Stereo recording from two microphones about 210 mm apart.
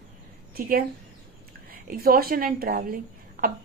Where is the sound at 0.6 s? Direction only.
45° right (ahead or behind).